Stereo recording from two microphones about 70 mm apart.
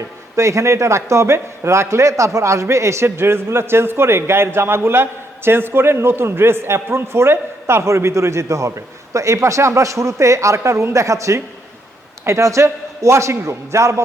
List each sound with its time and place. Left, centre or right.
0.3 s a man's voice: right